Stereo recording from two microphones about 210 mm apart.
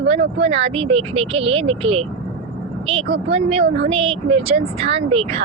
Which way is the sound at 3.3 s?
30° right (ahead or behind).